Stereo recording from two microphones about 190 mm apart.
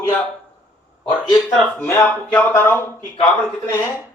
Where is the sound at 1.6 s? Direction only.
10° left (ahead or behind).